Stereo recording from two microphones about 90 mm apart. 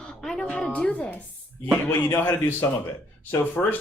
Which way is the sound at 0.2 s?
5° left (ahead or behind).